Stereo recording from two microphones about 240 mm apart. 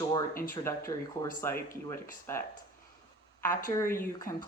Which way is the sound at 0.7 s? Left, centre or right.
Centre.